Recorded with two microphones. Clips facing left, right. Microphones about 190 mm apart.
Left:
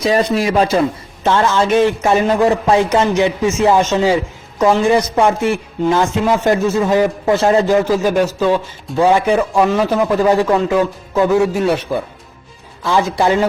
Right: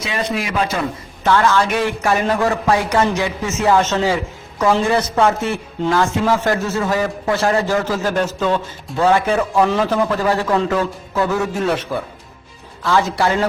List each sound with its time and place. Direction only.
0.0 s a man's voice: 35° left (ahead or behind); by 13.5 s 15° left (ahead or behind)